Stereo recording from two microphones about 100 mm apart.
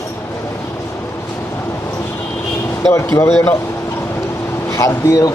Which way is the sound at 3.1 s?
25° left (ahead or behind).